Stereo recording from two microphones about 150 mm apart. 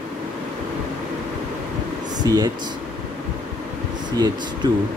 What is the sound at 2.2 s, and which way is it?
Speech, 25° right (ahead or behind).